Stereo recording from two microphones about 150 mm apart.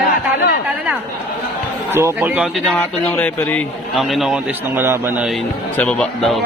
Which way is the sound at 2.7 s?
10° left (ahead or behind).